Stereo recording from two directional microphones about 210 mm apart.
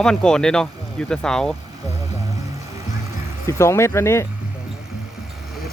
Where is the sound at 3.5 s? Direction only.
15° left (ahead or behind).